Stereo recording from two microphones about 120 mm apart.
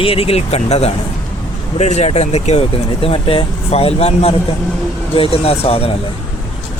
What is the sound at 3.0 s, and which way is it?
Speech, 50° left (ahead or behind).